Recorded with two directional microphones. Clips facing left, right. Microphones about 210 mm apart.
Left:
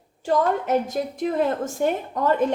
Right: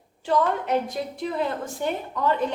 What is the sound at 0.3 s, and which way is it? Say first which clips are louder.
A woman's voice: left 2 dB; 45° left (ahead or behind).